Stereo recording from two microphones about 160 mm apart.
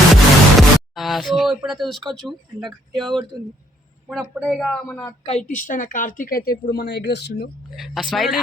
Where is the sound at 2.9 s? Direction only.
Centre (ahead or behind).